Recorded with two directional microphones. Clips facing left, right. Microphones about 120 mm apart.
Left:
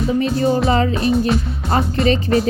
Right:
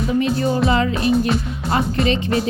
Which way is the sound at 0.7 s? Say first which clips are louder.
Left 1 dB; 35° left (ahead or behind).